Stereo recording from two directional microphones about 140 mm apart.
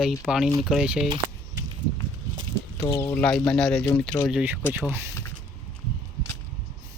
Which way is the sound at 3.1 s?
5° left (ahead or behind).